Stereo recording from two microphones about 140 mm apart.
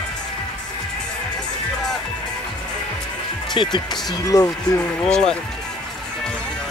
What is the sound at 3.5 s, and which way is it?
Speech, 30° left (ahead or behind).